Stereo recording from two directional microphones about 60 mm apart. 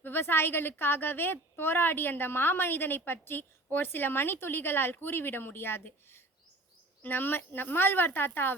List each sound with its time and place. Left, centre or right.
0.0 s a woman's voice: left